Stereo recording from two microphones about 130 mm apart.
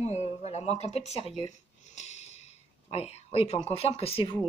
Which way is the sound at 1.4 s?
60° left (ahead or behind).